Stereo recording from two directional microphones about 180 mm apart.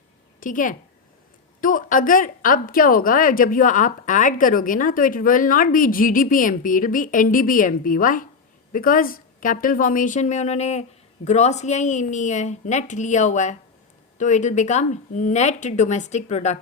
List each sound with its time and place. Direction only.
0.3 s a woman's voice: 50° left (ahead or behind)